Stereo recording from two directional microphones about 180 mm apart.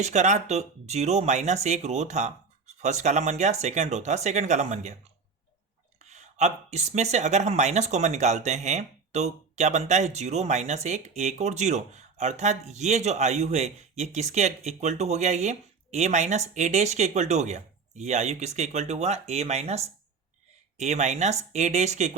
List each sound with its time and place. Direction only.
0.0 s speech: 40° right (ahead or behind)
6.1 s speech: 40° right (ahead or behind)